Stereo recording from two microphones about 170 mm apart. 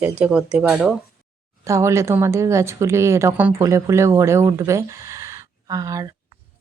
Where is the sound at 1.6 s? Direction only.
15° right (ahead or behind).